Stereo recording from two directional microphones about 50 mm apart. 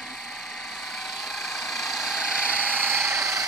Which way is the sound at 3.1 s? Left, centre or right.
Right.